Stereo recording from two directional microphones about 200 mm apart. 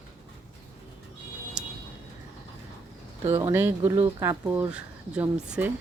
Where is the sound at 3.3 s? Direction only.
15° right (ahead or behind).